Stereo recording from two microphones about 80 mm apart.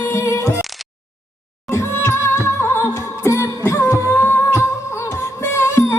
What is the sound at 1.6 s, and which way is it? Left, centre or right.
Music, left.